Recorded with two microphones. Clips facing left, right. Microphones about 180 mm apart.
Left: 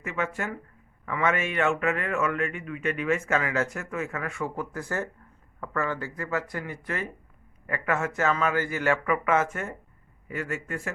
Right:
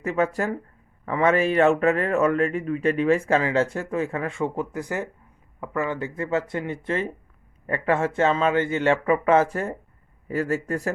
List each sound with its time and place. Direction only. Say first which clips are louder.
0.0 s a man's voice: right 7 dB; 35° right (ahead or behind)